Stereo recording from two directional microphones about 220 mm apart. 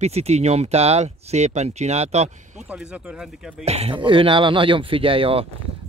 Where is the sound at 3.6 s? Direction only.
30° right (ahead or behind).